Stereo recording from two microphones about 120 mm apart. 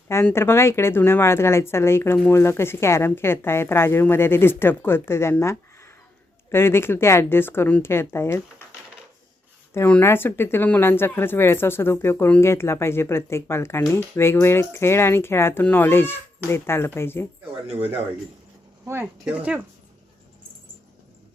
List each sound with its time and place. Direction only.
0.3 s speech: 20° left (ahead or behind)
9.7 s speech: 15° left (ahead or behind)
19.2 s speech: 10° right (ahead or behind)